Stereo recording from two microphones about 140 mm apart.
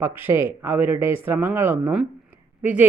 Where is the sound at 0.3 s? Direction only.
15° right (ahead or behind).